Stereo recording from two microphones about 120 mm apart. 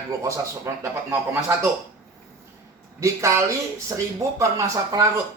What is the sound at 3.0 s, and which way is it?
Speech, 25° right (ahead or behind).